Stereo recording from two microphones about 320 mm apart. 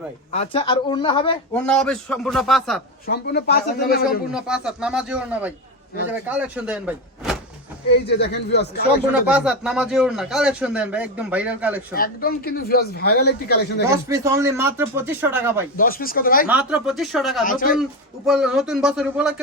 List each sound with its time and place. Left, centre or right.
0.3 s speech: centre
1.6 s a man's voice: centre
3.1 s speech: left
4.3 s a man's voice: centre
7.9 s speech: left
9.2 s a man's voice: centre
11.9 s speech: left
14.1 s speech: centre
15.8 s speech: left
16.5 s a man's voice: centre
17.4 s speech: left
18.3 s a man's voice: centre